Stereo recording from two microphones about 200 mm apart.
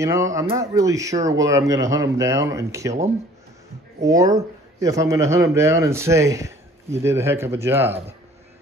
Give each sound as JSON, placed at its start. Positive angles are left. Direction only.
{"t": 0.0, "sound": "a man's voice", "side_deg": -15}